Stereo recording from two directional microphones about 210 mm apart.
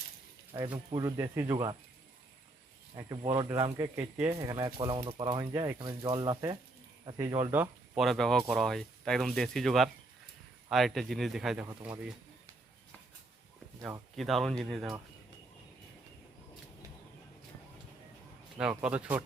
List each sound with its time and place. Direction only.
0.5 s speech: 20° right (ahead or behind)
2.9 s speech: 15° right (ahead or behind)
7.5 s speech: 5° right (ahead or behind)
14.2 s speech: centre (ahead or behind)
18.5 s speech: 5° right (ahead or behind)